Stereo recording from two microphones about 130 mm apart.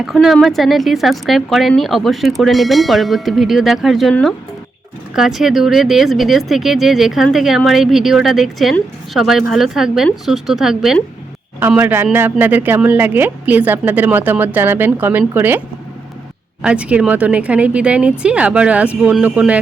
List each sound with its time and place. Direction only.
0.0 s speech: centre (ahead or behind)
11.8 s a woman's voice: 15° right (ahead or behind)
16.6 s a woman's voice: 10° right (ahead or behind)